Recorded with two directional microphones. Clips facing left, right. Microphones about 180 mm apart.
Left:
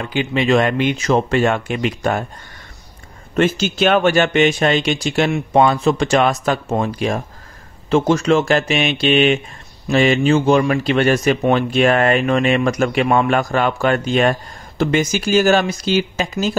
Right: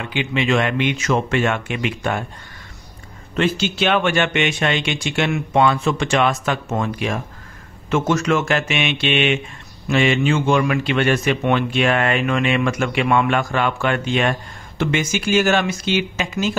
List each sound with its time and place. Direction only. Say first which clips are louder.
0.0 s speech: left 3 dB; 40° left (ahead or behind)
3.3 s speech: left 3 dB; 45° left (ahead or behind)